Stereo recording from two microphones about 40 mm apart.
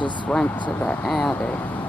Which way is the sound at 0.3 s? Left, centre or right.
Left.